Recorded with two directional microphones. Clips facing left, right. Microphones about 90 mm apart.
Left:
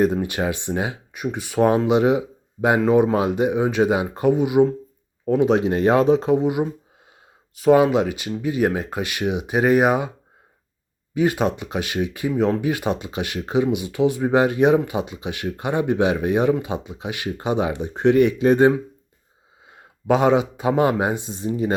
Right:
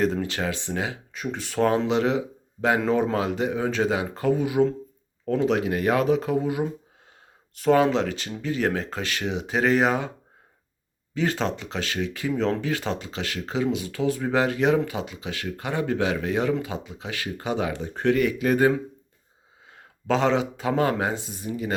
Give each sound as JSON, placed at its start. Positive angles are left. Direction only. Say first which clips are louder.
{"t": 0.0, "sound": "speech", "louder": "left 5 dB", "side_deg": 20}
{"t": 7.5, "sound": "speech", "louder": "left 4 dB", "side_deg": 10}
{"t": 11.1, "sound": "speech", "louder": "left 5 dB", "side_deg": 15}